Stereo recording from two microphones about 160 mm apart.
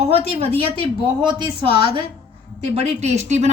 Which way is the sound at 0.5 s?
35° right (ahead or behind).